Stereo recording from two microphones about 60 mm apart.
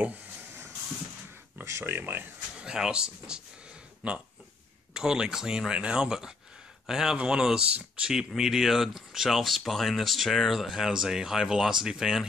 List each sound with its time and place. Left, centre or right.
1.6 s a sound: right
1.9 s speech: right
2.6 s speech: centre